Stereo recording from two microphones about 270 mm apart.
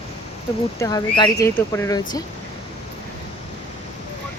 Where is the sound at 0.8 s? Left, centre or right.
Centre.